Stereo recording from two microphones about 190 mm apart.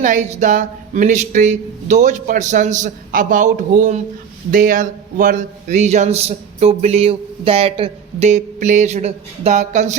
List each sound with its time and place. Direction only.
0.0 s a man's voice: 40° right (ahead or behind)